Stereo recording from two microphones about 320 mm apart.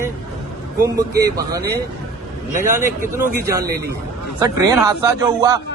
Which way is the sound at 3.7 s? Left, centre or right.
Right.